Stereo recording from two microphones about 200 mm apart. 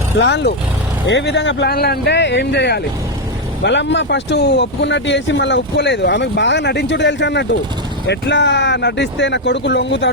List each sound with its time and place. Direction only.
0.2 s speech: 60° left (ahead or behind)